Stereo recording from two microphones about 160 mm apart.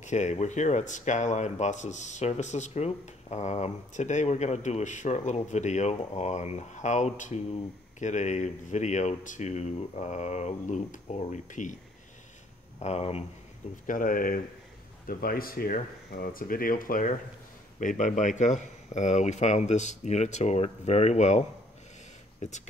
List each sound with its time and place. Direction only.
0.0 s speech: 45° left (ahead or behind)
12.8 s speech: 40° left (ahead or behind)
13.8 s speech: 60° left (ahead or behind)